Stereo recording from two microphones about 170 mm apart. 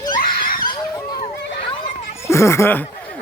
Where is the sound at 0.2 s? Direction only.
55° left (ahead or behind).